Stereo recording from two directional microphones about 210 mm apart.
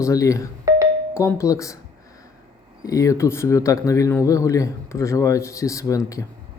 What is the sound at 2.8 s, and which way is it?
Speech, 15° left (ahead or behind).